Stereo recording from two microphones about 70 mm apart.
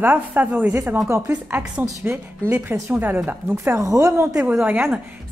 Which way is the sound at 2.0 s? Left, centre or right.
Right.